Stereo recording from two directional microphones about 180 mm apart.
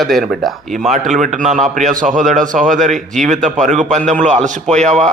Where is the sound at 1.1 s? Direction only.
45° right (ahead or behind).